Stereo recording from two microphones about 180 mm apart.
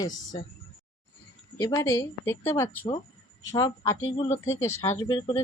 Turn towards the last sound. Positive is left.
turn(degrees=30)  # may be behind; listen again after turning